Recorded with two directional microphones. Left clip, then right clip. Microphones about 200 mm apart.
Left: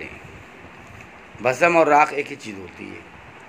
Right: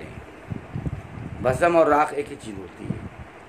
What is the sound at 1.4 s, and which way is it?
Speech, centre (ahead or behind).